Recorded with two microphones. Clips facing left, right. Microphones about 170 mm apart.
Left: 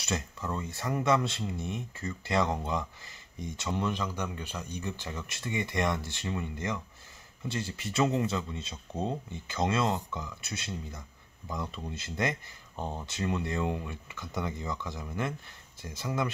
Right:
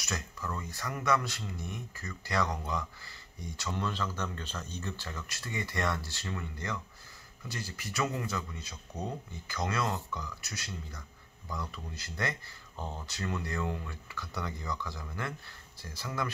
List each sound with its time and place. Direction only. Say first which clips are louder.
0.0 s speech: left 4 dB; 25° left (ahead or behind)